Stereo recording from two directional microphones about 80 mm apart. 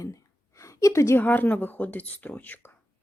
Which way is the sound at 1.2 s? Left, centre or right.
Left.